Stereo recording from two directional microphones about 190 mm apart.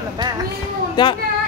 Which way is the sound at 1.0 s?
20° left (ahead or behind).